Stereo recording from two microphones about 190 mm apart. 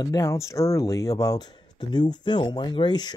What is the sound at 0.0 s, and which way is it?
Speech, 15° left (ahead or behind).